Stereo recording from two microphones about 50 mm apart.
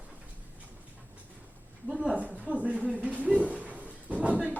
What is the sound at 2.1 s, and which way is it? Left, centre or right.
Speech, right.